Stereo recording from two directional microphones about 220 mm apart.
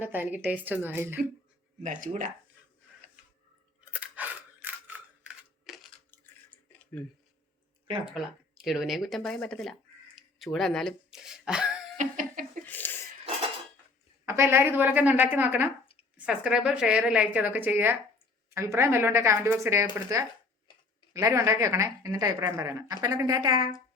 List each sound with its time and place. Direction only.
0.0 s a woman's voice: 10° right (ahead or behind)
1.8 s speech: 35° right (ahead or behind)
3.9 s scissors: 5° right (ahead or behind)
8.1 s a woman's voice: centre (ahead or behind)
10.2 s a sound: centre (ahead or behind)
11.9 s laughter: 35° right (ahead or behind)
12.6 s a sound: 10° left (ahead or behind)
14.3 s a woman's voice: 10° right (ahead or behind)